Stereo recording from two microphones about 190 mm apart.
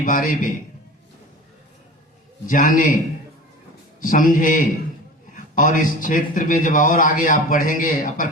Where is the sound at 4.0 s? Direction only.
45° left (ahead or behind).